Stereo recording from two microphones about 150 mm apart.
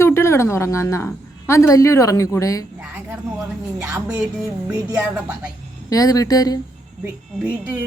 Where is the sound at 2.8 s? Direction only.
5° right (ahead or behind).